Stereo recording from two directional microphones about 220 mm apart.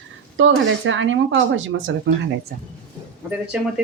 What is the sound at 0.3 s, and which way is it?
Speech, 60° right (ahead or behind).